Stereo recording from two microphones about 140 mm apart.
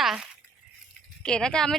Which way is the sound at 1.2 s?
5° left (ahead or behind).